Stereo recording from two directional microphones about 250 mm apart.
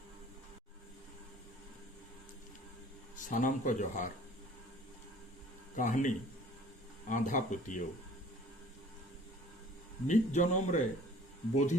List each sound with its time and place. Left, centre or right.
3.2 s speech: left
5.7 s speech: left
10.1 s speech: left